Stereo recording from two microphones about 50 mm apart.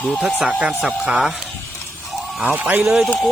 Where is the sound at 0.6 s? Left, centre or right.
Centre.